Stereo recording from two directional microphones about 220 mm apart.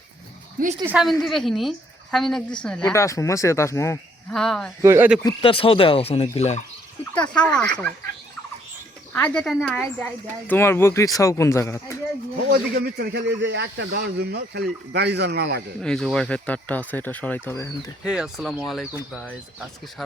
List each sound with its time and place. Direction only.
1.2 s a woman's voice: centre (ahead or behind)
4.8 s speech: 10° right (ahead or behind)
5.2 s speech: 25° left (ahead or behind)
7.3 s a woman's voice: 5° left (ahead or behind)
9.1 s speech: 5° left (ahead or behind)
12.5 s a man's voice: 45° right (ahead or behind)
15.8 s speech: centre (ahead or behind)
18.0 s a woman's voice: 5° right (ahead or behind)